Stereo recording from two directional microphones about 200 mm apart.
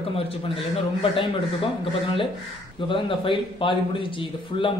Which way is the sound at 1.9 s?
25° left (ahead or behind).